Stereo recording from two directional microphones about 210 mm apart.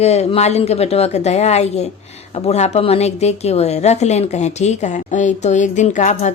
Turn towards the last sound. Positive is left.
turn(degrees=35)  # may be behind; listen again after turning